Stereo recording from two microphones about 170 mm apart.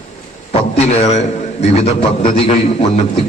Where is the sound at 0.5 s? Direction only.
40° left (ahead or behind).